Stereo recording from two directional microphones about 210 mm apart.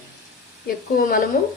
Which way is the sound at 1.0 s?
40° left (ahead or behind).